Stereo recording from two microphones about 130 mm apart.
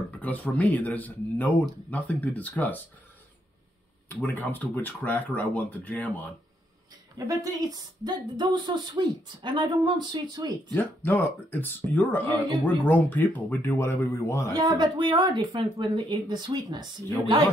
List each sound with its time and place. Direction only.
0.1 s speech: 10° left (ahead or behind)
4.2 s speech: 15° left (ahead or behind)
7.2 s speech: 30° right (ahead or behind)
11.1 s speech: 15° left (ahead or behind)
14.5 s speech: 35° right (ahead or behind)